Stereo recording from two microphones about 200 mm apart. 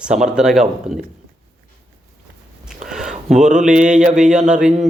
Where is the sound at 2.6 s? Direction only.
5° right (ahead or behind).